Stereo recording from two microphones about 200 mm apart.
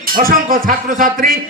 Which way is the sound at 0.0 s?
45° right (ahead or behind).